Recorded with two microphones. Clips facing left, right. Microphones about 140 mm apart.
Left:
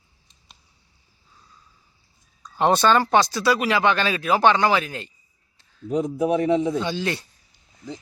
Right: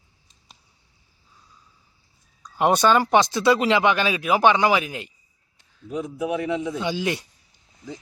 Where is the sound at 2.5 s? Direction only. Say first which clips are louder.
Even; 10° right (ahead or behind).